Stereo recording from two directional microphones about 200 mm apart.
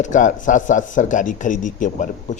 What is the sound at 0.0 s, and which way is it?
A man's voice, 40° left (ahead or behind).